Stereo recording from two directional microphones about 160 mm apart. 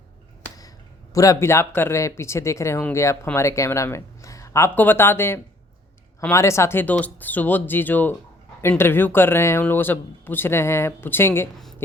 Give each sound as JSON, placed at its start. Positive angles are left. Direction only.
{"t": 1.1, "sound": "speech", "side_deg": 20}